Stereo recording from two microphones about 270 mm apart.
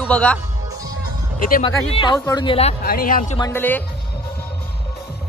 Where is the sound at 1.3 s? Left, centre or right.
Left.